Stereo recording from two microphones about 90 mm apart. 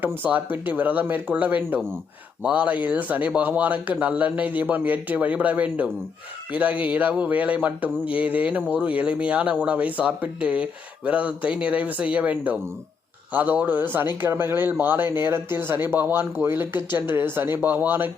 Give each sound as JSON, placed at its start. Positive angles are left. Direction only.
{"t": 0.0, "sound": "speech", "side_deg": -20}